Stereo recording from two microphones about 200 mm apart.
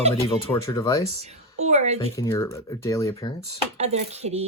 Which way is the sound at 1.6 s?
35° right (ahead or behind).